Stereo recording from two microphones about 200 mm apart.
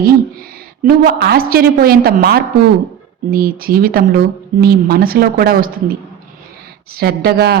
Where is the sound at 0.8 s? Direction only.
50° right (ahead or behind).